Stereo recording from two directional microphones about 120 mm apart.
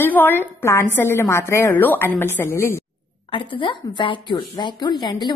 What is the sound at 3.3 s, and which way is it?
A woman's voice, 45° left (ahead or behind).